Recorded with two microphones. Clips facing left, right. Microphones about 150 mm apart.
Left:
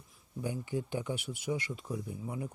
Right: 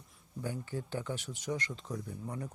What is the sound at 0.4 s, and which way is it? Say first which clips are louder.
A man's voice: left 3 dB; 15° left (ahead or behind).